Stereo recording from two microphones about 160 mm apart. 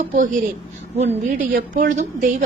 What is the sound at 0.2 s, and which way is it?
Speech, 55° right (ahead or behind).